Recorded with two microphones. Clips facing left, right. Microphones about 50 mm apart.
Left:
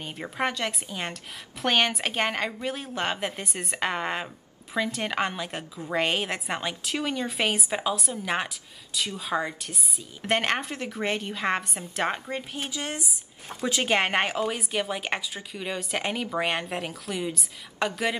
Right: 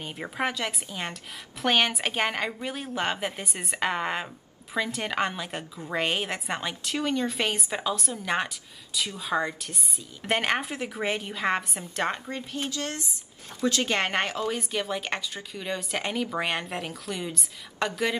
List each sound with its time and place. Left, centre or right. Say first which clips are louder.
0.0 s speech: left 1 dB; centre
12.5 s speech: right 1 dB; centre